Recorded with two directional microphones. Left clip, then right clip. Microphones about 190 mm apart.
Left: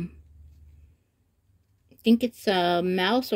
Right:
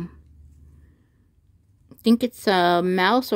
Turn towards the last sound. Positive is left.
turn(degrees=-20)  # may be behind; listen again after turning